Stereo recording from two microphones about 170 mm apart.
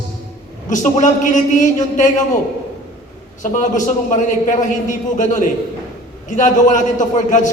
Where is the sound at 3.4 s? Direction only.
50° left (ahead or behind).